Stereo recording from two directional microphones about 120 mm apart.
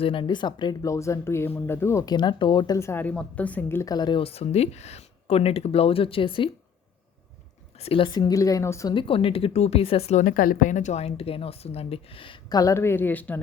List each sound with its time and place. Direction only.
0.0 s speech: 45° left (ahead or behind); by 2.0 s 20° left (ahead or behind)
2.0 s speech: 40° left (ahead or behind)
2.7 s a woman's voice: 20° left (ahead or behind)
3.8 s speech: 35° left (ahead or behind)
4.2 s a woman's voice: 55° left (ahead or behind)
7.8 s speech: 50° left (ahead or behind); by 8.9 s 25° left (ahead or behind)
8.9 s speech: 45° left (ahead or behind)
10.2 s a woman's voice: 90° left; by 12.5 s 45° left (ahead or behind)
12.5 s speech: 25° left (ahead or behind)